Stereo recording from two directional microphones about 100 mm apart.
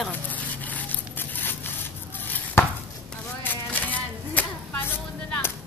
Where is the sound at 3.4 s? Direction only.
15° left (ahead or behind).